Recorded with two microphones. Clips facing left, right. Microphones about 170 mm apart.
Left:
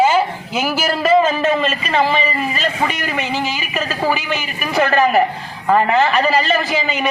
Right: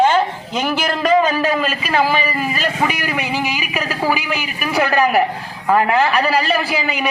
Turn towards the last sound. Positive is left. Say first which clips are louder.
# left 1 dB
turn(degrees=-5)  # may be behind; listen again after turning